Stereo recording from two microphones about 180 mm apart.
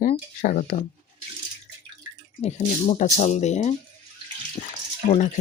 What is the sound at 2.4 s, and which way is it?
Speech, 40° left (ahead or behind).